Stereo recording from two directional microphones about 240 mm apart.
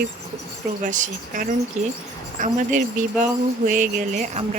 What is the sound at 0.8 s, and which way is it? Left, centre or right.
Speech, right.